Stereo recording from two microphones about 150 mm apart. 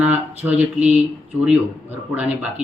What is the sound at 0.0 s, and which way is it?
Speech, 10° right (ahead or behind).